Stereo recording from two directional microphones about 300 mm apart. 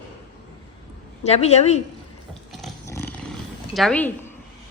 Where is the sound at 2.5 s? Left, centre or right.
Centre.